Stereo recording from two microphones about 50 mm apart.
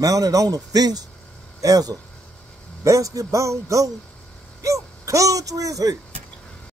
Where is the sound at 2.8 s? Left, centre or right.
Right.